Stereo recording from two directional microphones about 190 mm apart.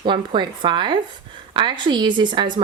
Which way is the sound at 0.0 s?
25° right (ahead or behind).